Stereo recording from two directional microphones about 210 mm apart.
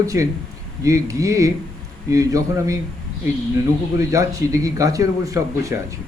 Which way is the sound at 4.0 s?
15° right (ahead or behind).